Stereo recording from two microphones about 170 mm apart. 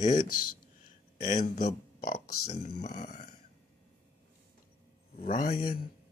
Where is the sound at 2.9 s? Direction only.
45° left (ahead or behind).